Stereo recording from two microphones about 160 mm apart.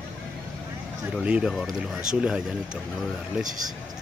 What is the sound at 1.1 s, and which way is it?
Speech, 5° right (ahead or behind).